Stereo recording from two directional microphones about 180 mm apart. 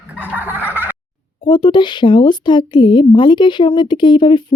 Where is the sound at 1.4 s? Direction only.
25° left (ahead or behind).